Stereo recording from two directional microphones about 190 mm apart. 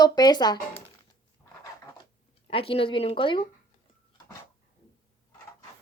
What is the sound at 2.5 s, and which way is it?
Speech, 30° left (ahead or behind).